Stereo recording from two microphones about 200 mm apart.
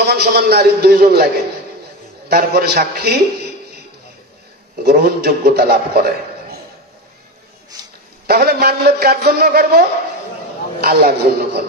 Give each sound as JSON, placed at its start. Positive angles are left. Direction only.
{"t": 0.0, "sound": "a man's voice", "side_deg": -55}
{"t": 2.2, "sound": "a man's voice", "side_deg": -50}
{"t": 4.8, "sound": "a man's voice", "side_deg": -50}
{"t": 7.7, "sound": "a sound", "side_deg": -20}
{"t": 8.3, "sound": "a man's voice", "side_deg": -50}